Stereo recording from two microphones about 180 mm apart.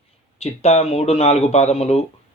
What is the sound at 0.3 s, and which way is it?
A man's voice, 35° left (ahead or behind).